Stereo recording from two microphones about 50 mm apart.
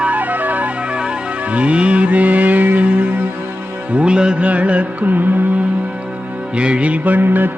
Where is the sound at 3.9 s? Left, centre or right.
Centre; by 5.3 s right.